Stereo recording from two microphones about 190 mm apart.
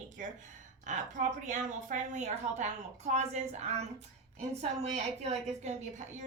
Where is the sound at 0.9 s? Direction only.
40° right (ahead or behind).